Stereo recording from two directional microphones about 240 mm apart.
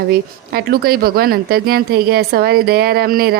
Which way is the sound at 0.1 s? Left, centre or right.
Right.